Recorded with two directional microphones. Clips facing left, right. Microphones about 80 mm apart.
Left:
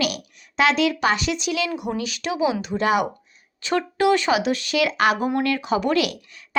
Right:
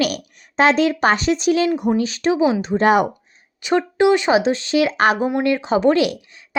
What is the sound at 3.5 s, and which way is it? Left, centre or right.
Speech, right.